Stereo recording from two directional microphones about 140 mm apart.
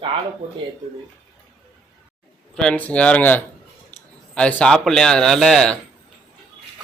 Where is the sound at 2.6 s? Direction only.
5° left (ahead or behind).